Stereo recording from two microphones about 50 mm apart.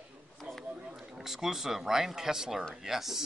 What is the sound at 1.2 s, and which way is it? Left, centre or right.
Speech, centre.